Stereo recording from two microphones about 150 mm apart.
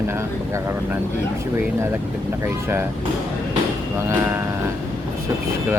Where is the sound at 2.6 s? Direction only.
15° right (ahead or behind).